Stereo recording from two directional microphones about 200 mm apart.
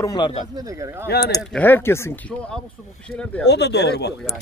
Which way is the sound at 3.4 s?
55° left (ahead or behind).